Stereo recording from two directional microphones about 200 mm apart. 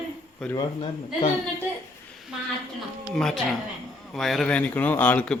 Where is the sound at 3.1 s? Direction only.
Centre (ahead or behind).